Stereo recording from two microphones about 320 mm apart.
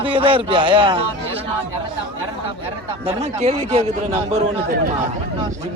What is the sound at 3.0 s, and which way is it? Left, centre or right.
Speech, centre.